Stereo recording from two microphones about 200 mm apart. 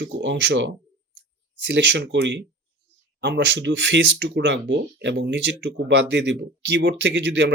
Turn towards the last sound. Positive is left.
turn(degrees=-60)  # may be behind; listen again after turning